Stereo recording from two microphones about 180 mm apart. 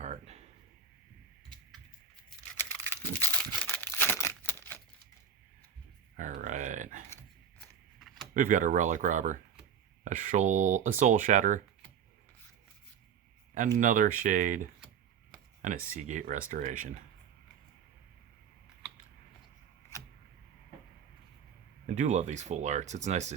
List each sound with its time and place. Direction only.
0.0 s a sound: 35° right (ahead or behind)
2.6 s crumpling: 10° left (ahead or behind)
6.1 s a sound: 45° right (ahead or behind)
7.9 s keys jangling: centre (ahead or behind)
8.3 s speech: 45° right (ahead or behind)
13.7 s speech: 45° right (ahead or behind)
21.8 s speech: 40° right (ahead or behind)